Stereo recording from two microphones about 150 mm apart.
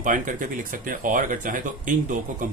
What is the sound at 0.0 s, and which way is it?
Speech, 60° right (ahead or behind).